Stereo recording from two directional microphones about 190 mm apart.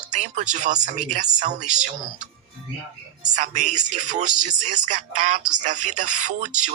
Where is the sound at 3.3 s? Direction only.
40° right (ahead or behind).